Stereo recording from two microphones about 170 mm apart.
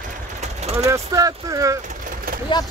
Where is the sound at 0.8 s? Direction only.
20° right (ahead or behind).